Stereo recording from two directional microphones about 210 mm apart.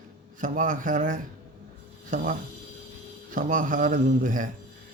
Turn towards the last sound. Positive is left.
turn(degrees=-40)  # may be behind; listen again after turning